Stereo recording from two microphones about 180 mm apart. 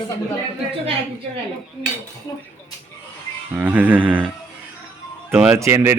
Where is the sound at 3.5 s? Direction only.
10° right (ahead or behind).